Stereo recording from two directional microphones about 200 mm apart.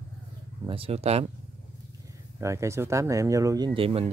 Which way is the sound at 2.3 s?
15° right (ahead or behind).